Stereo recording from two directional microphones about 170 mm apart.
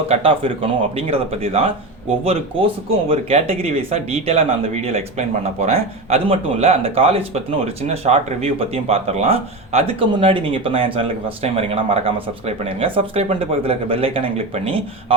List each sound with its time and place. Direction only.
0.1 s speech: 30° right (ahead or behind)